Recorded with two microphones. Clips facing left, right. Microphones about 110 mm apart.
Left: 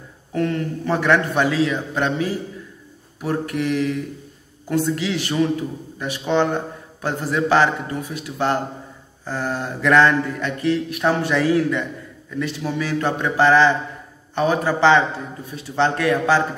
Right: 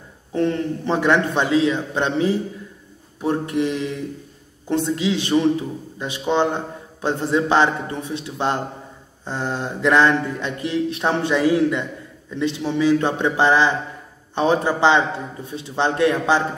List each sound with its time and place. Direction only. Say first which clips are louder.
0.3 s a man's voice: right 2 dB; 25° right (ahead or behind)